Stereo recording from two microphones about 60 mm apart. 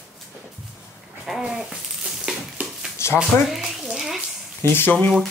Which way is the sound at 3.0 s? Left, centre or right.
Left.